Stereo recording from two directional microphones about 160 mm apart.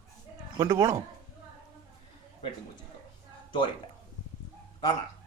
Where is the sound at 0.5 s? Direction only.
25° right (ahead or behind).